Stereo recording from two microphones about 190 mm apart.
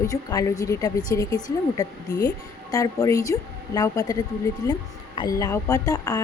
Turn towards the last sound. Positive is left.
turn(degrees=20)  # may be behind; listen again after turning